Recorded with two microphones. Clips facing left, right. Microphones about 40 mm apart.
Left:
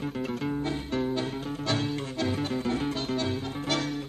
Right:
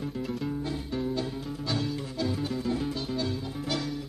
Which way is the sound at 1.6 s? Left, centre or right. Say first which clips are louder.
Left 2 dB; left.